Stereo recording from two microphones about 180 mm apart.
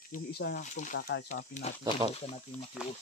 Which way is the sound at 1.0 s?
75° left (ahead or behind).